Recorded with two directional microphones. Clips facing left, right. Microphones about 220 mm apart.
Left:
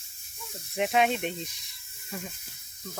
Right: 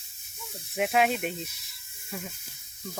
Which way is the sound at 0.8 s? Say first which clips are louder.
Even; 5° right (ahead or behind).